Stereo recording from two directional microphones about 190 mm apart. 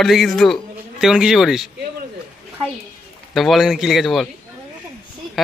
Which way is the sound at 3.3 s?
Centre (ahead or behind).